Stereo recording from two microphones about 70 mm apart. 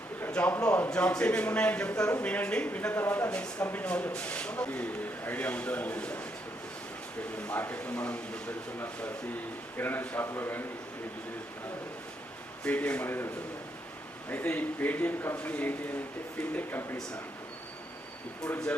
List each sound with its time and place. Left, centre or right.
0.3 s speech: centre
7.4 s speech: left
9.7 s speech: left
12.6 s speech: centre
13.1 s a man's voice: left